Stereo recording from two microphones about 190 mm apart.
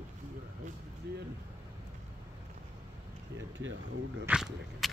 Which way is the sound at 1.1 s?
55° right (ahead or behind).